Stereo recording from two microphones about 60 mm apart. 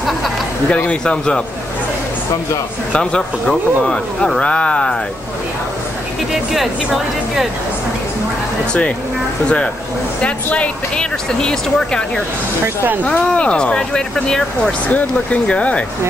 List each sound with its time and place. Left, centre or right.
0.7 s speech: left
2.9 s speech: centre
6.5 s a woman's voice: centre
10.2 s speech: left
12.6 s speech: right
13.2 s speech: centre
14.9 s speech: left